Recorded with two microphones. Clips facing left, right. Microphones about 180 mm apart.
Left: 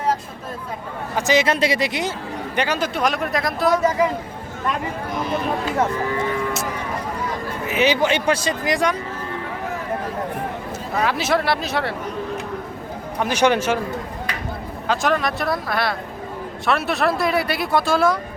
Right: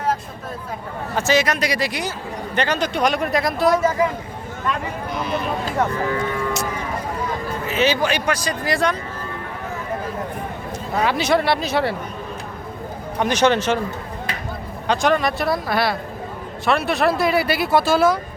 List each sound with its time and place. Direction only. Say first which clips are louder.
1.1 s speech: left 1 dB; 20° left (ahead or behind)
2.6 s speech: right 1 dB; 5° left (ahead or behind)
7.7 s speech: left 1 dB; 15° left (ahead or behind)
10.9 s speech: right 2 dB; centre (ahead or behind)
13.1 s speech: right 1 dB; 5° left (ahead or behind)
14.8 s speech: right 2 dB; centre (ahead or behind)